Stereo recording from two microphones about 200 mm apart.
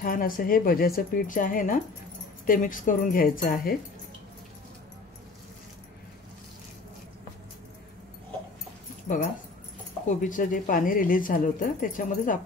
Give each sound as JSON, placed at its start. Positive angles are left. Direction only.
{"t": 0.0, "sound": "speech", "side_deg": 45}
{"t": 9.0, "sound": "speech", "side_deg": 40}